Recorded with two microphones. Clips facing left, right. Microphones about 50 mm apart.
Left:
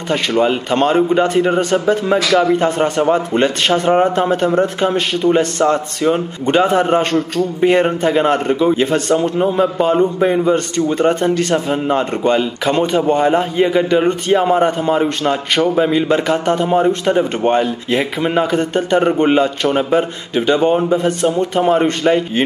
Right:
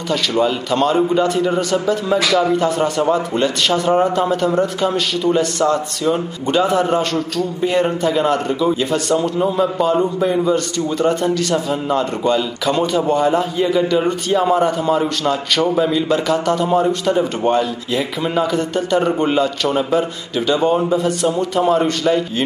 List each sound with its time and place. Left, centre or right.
0.1 s a man's voice: left
15.6 s a man's voice: centre
15.9 s a man's voice: left